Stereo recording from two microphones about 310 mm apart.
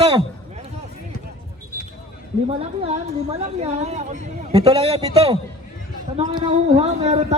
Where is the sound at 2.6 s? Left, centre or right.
Centre.